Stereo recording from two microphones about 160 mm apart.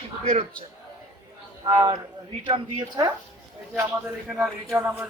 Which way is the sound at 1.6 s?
25° right (ahead or behind).